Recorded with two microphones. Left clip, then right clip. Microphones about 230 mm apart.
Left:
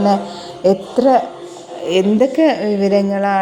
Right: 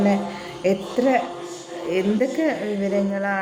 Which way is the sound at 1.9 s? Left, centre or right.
Left.